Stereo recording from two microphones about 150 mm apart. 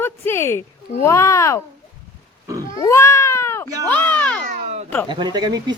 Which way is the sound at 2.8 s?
20° left (ahead or behind).